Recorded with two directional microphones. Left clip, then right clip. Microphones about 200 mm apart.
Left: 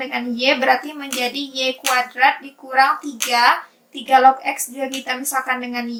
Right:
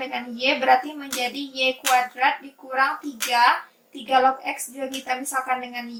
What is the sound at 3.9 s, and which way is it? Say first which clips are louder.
A woman's voice: left 7 dB; 40° left (ahead or behind).